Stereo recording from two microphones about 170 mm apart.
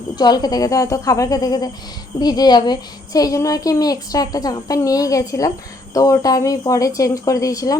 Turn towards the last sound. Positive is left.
turn(degrees=20)  # may be behind; listen again after turning